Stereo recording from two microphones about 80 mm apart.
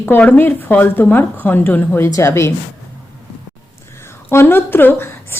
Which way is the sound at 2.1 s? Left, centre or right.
Left.